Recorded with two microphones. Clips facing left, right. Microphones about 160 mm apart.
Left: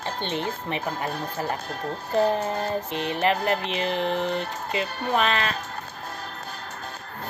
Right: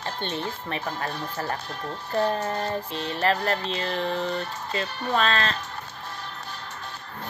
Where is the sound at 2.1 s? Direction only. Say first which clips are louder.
Left 2 dB; 20° left (ahead or behind).